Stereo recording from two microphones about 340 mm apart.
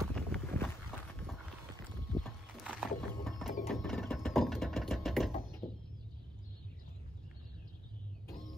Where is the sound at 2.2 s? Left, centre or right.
Centre.